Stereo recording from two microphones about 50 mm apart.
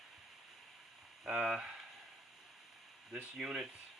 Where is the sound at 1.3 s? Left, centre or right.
Centre.